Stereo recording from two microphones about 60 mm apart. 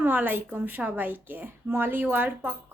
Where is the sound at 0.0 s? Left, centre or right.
Right.